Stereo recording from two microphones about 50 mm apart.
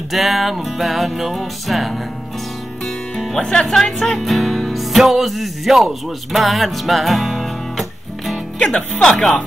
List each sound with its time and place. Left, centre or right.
0.1 s music: centre
8.5 s speech: centre